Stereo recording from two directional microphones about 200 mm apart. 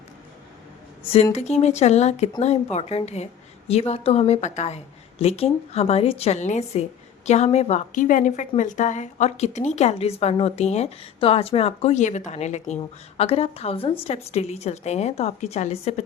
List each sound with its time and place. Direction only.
1.1 s a woman's voice: 30° left (ahead or behind)